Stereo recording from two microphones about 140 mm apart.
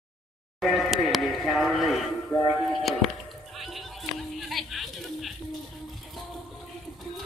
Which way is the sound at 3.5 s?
Centre (ahead or behind).